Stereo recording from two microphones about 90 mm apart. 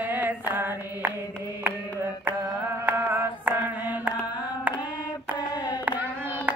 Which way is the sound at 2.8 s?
20° right (ahead or behind).